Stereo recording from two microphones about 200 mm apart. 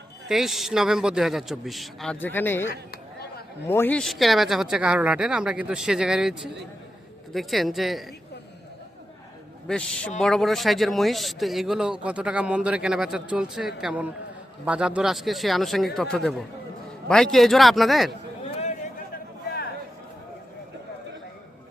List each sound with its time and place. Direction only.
0.3 s speech: centre (ahead or behind)
2.9 s chatter: 50° left (ahead or behind)
3.7 s speech: 10° left (ahead or behind)
9.6 s a man's voice: 5° left (ahead or behind)